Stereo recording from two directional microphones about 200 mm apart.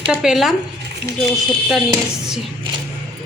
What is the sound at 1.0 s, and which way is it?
Speech, 55° right (ahead or behind).